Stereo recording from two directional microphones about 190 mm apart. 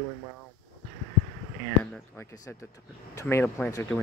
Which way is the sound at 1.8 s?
10° left (ahead or behind).